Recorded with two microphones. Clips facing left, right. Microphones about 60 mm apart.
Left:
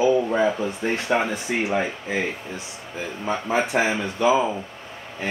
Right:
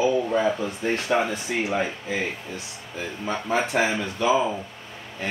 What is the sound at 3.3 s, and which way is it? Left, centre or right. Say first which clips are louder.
Speech: left 2 dB; centre.